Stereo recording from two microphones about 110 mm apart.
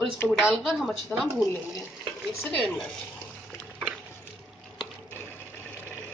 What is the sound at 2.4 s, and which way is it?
Speech, 15° left (ahead or behind).